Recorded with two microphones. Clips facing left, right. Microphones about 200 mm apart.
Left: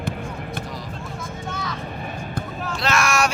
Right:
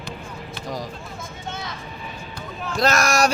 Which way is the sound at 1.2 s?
25° right (ahead or behind).